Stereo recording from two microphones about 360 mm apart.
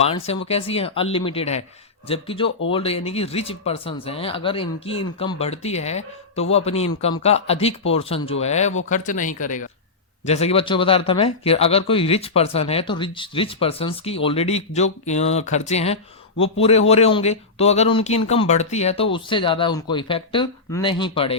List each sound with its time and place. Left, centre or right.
0.0 s speech: centre